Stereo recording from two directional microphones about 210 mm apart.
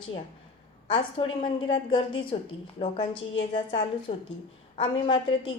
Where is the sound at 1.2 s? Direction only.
25° left (ahead or behind).